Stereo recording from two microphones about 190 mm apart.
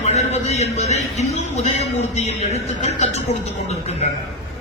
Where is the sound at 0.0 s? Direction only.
35° left (ahead or behind).